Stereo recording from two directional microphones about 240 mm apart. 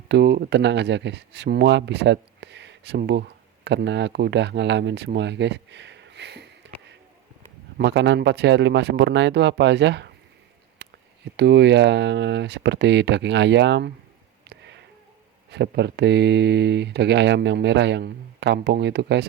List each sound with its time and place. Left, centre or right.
0.1 s speech: right
7.8 s speech: right
10.8 s a sound: right
11.3 s speech: right
14.5 s a sound: right
15.4 s speech: right